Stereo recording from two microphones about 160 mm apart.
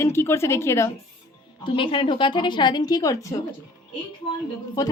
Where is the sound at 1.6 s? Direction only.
35° left (ahead or behind).